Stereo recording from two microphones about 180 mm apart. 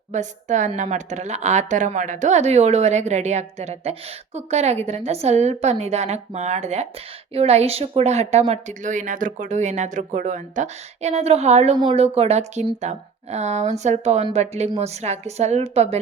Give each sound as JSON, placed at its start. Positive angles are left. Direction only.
{"t": 0.1, "sound": "a woman's voice", "side_deg": -40}